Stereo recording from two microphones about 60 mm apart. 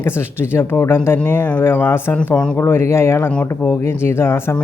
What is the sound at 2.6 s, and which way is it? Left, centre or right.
Speech, left.